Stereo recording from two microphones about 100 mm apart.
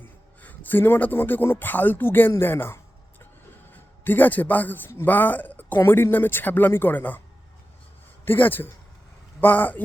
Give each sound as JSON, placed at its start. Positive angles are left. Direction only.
{"t": 0.0, "sound": "speech", "side_deg": 20}
{"t": 2.3, "sound": "a sound", "side_deg": 20}
{"t": 3.7, "sound": "a man's voice", "side_deg": 20}
{"t": 8.2, "sound": "a man's voice", "side_deg": 20}